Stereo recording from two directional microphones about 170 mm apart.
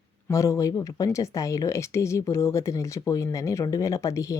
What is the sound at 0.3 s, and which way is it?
A woman's voice, 15° left (ahead or behind).